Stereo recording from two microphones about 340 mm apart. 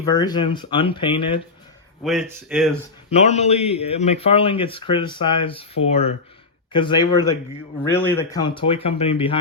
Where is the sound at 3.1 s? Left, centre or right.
Centre.